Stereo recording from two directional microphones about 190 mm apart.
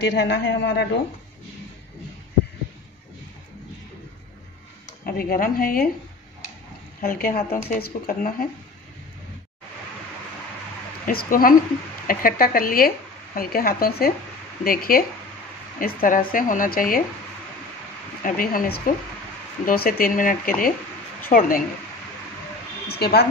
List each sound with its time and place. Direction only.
0.0 s speech: 65° left (ahead or behind)
4.8 s speech: 50° left (ahead or behind)
7.0 s speech: 50° left (ahead or behind)
11.1 s speech: 50° left (ahead or behind)
18.2 s speech: 50° left (ahead or behind)
22.8 s speech: 55° left (ahead or behind)